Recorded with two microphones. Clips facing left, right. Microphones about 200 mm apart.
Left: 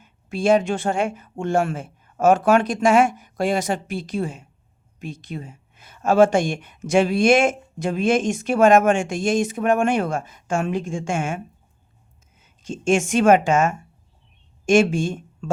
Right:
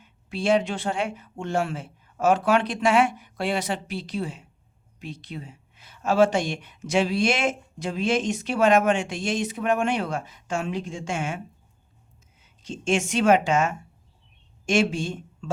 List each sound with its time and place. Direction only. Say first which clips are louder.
0.0 s a woman's voice: left 5 dB; 45° left (ahead or behind)
12.4 s a woman's voice: left 4 dB; 50° left (ahead or behind)